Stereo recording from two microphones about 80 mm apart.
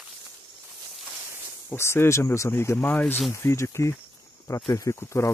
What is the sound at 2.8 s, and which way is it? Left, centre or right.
Speech, left.